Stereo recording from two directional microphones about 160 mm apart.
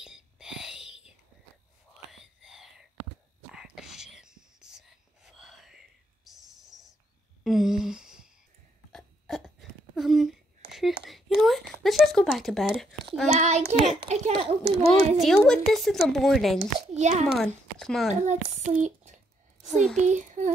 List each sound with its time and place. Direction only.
0.0 s whispering: 5° right (ahead or behind)
7.4 s a sound: centre (ahead or behind)
13.3 s a child's voice: 45° right (ahead or behind)
14.9 s a woman's voice: centre (ahead or behind)
16.5 s a child's voice: 45° right (ahead or behind)
17.4 s speech: 5° left (ahead or behind)
18.2 s a child's voice: 45° right (ahead or behind)
19.7 s a woman's voice: centre (ahead or behind)
20.1 s speech: 50° right (ahead or behind)